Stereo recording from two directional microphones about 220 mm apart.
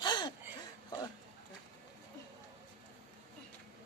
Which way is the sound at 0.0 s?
20° left (ahead or behind).